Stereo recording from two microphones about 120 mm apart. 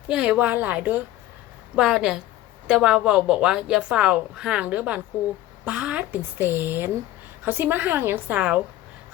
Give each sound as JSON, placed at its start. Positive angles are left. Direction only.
{"t": 0.1, "sound": "a woman's voice", "side_deg": -10}